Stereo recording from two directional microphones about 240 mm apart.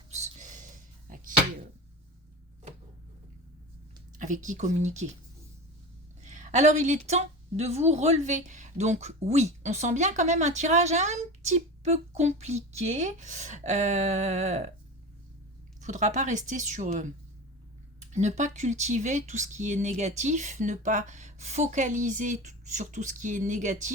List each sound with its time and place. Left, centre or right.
0.1 s a sound: right
4.2 s a woman's voice: right
6.2 s speech: right
15.8 s a woman's voice: right
18.1 s speech: right